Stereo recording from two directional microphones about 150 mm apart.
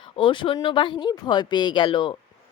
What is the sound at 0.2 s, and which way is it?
A woman's voice, 35° left (ahead or behind).